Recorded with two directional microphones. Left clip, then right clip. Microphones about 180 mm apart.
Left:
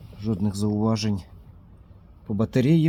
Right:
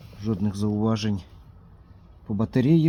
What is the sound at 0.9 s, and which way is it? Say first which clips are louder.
Speech: left 1 dB; 25° left (ahead or behind).